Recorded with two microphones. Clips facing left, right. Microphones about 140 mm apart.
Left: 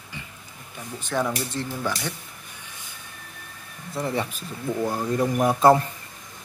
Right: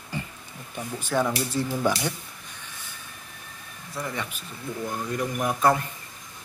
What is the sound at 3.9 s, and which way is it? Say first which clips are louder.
Speech: left 6 dB; 30° left (ahead or behind).